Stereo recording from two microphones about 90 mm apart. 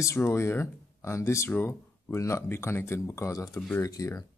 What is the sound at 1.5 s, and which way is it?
Speech, 20° left (ahead or behind).